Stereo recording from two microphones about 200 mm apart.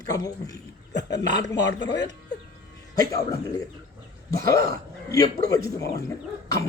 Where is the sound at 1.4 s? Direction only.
60° left (ahead or behind).